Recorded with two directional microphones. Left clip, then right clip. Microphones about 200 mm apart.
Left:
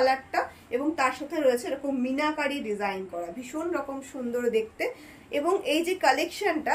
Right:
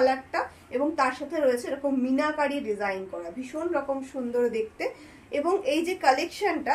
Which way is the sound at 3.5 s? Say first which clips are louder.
Right 1 dB; 35° left (ahead or behind).